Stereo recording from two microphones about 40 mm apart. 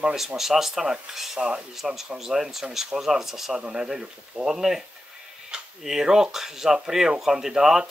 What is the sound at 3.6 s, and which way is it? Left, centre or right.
Speech, centre.